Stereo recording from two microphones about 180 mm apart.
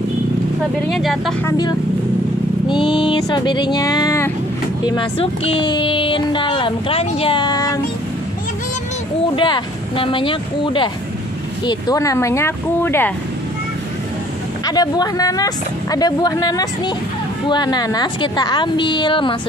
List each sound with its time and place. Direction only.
0.8 s speech: centre (ahead or behind)
1.4 s speech: 20° left (ahead or behind)
4.8 s speech: 30° left (ahead or behind)
9.3 s speech: 30° left (ahead or behind); by 13.1 s 10° left (ahead or behind)
14.7 s speech: 20° left (ahead or behind)